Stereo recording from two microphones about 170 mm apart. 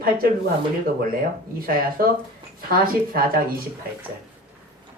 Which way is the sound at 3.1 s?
60° right (ahead or behind).